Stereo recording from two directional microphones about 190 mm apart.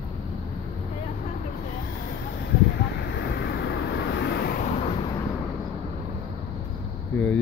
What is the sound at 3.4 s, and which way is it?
Vehicle, 60° left (ahead or behind).